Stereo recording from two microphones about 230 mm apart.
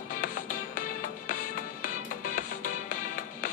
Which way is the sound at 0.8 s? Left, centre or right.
Left.